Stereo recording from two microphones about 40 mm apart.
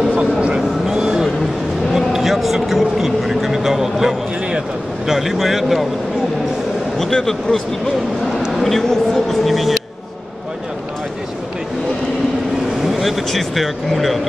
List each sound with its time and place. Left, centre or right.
0.1 s vehicle: right
2.0 s a sound: centre
5.0 s vehicle: centre
7.0 s speech: centre
8.6 s speech: centre
13.0 s speech: centre